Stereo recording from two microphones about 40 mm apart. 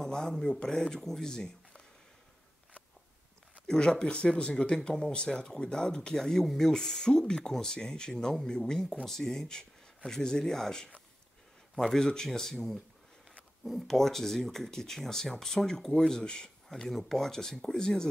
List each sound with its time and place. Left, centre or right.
0.0 s speech: centre
3.6 s a man's voice: left; by 12.8 s centre
13.8 s speech: centre
16.6 s speech: centre